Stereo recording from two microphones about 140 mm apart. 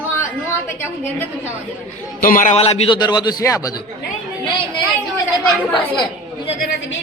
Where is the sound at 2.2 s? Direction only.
75° left (ahead or behind).